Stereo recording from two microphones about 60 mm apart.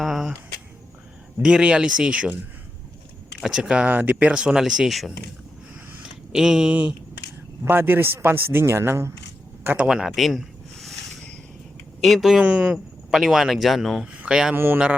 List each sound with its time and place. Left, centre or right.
0.0 s a sound: centre
1.4 s speech: centre
3.6 s speech: centre
3.9 s speech: right; by 4.9 s centre
6.3 s speech: centre
7.7 s a man's voice: right
9.7 s speech: centre
10.2 s a sound: centre
12.0 s speech: centre
12.4 s speech: centre
12.7 s speech: centre
14.1 s speech: centre
14.5 s a man's voice: right